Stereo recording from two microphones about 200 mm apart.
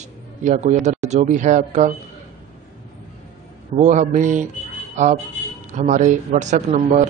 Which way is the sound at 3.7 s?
35° right (ahead or behind).